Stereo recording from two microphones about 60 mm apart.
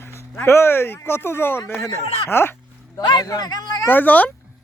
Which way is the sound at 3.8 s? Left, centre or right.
Left.